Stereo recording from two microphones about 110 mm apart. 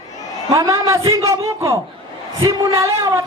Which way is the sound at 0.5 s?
30° right (ahead or behind).